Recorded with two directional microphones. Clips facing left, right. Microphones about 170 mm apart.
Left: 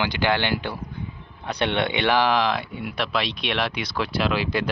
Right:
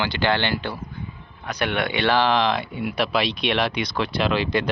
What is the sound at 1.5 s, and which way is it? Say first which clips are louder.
Speech: left 1 dB; 25° left (ahead or behind).